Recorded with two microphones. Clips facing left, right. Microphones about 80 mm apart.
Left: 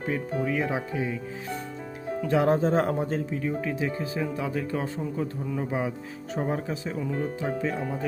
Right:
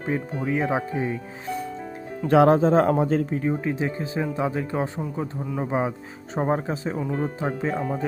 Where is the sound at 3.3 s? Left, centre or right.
Right.